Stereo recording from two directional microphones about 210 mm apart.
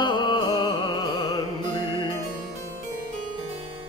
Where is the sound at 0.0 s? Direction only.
20° left (ahead or behind).